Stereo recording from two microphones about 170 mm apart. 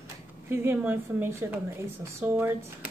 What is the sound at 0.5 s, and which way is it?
Speech, 15° right (ahead or behind).